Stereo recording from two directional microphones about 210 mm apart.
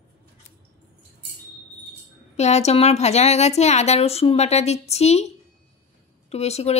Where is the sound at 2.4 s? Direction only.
30° left (ahead or behind).